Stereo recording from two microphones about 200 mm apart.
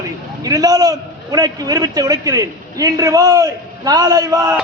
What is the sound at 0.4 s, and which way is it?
A man's voice, 20° right (ahead or behind).